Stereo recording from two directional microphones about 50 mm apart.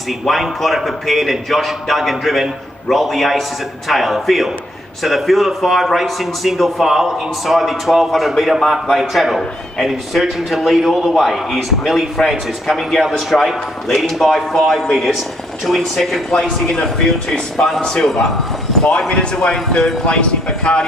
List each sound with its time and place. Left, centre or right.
0.2 s a man's voice: centre